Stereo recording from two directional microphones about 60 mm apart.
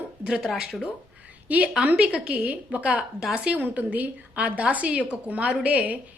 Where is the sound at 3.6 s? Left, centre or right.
Right.